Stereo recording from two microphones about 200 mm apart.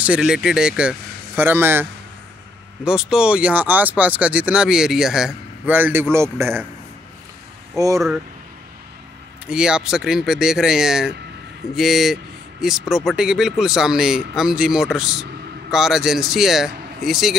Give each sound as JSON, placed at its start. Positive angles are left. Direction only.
{"t": 0.0, "sound": "speech", "side_deg": -5}
{"t": 7.7, "sound": "speech", "side_deg": -15}
{"t": 9.5, "sound": "speech", "side_deg": -5}